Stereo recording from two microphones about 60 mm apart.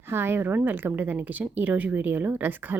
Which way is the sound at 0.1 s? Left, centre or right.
Right.